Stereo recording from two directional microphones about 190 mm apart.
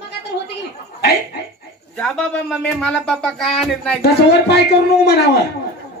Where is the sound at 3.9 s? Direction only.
60° left (ahead or behind).